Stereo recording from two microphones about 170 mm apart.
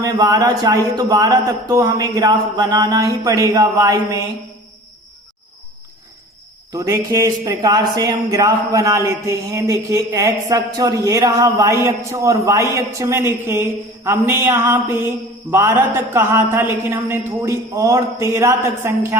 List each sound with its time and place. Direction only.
0.0 s a man's voice: 20° right (ahead or behind)
6.7 s speech: 20° right (ahead or behind)